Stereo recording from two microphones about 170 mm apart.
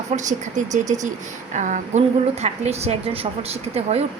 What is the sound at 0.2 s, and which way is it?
A woman's voice, 45° right (ahead or behind).